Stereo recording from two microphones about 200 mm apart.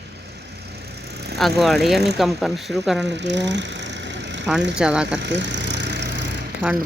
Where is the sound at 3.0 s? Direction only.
60° right (ahead or behind).